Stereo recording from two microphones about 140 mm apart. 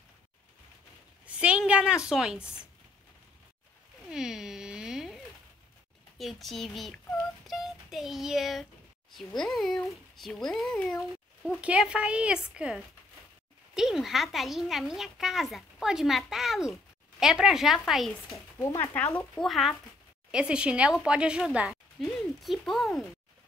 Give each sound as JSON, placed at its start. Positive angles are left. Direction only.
{"t": 1.2, "sound": "a woman's voice", "side_deg": -10}
{"t": 4.1, "sound": "a sound", "side_deg": -5}
{"t": 6.1, "sound": "a woman's voice", "side_deg": 0}
{"t": 18.3, "sound": "speech", "side_deg": 20}
{"t": 19.3, "sound": "a woman's voice", "side_deg": 0}